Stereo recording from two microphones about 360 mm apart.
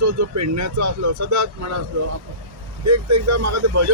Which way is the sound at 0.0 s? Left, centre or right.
Right.